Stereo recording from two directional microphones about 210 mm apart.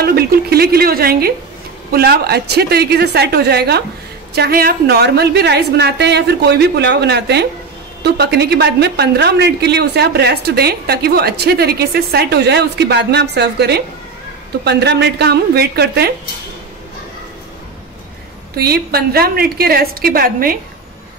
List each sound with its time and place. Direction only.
0.0 s a woman's voice: 45° right (ahead or behind)
18.6 s a woman's voice: 45° right (ahead or behind)